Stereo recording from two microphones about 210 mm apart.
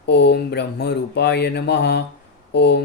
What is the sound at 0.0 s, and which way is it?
Speech, 55° left (ahead or behind).